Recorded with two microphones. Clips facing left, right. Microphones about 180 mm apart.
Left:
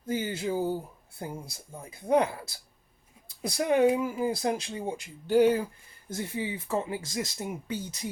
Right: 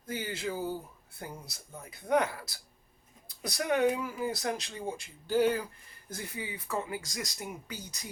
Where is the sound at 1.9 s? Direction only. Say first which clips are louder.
Left 4 dB; 25° left (ahead or behind).